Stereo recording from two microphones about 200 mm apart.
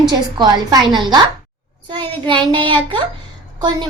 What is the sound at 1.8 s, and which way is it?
Child singing, 25° right (ahead or behind).